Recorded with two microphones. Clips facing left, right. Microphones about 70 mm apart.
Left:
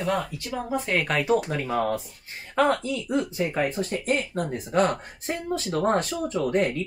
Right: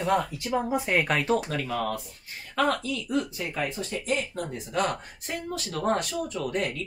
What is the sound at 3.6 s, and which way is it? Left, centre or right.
Speech, left.